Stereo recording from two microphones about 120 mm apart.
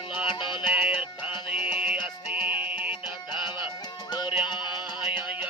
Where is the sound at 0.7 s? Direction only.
10° right (ahead or behind).